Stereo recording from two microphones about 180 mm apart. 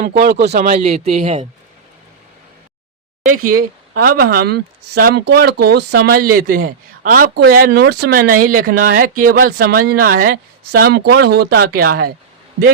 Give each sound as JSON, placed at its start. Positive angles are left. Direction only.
{"t": 0.0, "sound": "speech", "side_deg": -65}
{"t": 0.7, "sound": "speech", "side_deg": -35}
{"t": 3.2, "sound": "speech", "side_deg": -50}